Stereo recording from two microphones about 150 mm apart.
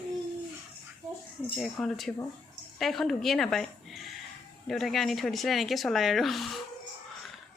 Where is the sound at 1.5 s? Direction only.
Centre (ahead or behind).